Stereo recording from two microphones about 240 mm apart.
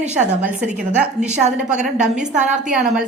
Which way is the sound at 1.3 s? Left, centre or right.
Right.